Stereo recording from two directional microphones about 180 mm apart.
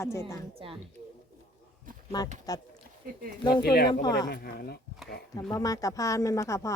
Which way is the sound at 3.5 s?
60° left (ahead or behind).